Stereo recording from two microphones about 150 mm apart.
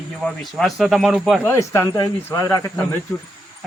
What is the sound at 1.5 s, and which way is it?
Speech, 20° left (ahead or behind).